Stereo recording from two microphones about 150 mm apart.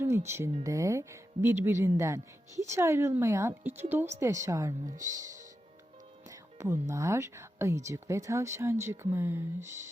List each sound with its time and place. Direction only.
0.3 s speech: 15° right (ahead or behind)